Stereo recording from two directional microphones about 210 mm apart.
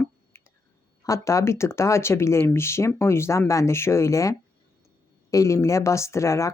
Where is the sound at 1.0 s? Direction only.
15° left (ahead or behind).